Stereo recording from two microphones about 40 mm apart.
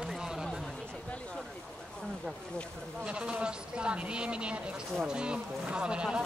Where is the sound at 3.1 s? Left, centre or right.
Right.